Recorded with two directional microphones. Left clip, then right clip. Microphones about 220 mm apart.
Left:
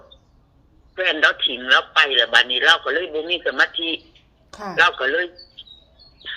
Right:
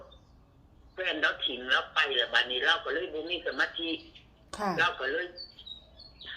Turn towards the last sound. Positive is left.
turn(degrees=50)  # may be behind; listen again after turning